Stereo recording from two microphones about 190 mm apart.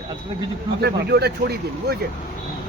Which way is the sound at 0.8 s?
60° right (ahead or behind).